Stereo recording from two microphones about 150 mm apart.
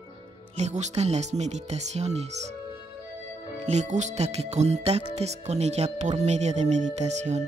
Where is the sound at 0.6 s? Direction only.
45° right (ahead or behind).